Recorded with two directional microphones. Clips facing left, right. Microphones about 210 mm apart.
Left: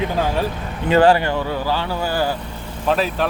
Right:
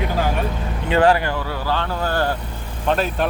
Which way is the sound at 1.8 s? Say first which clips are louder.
Left 1 dB; 5° left (ahead or behind).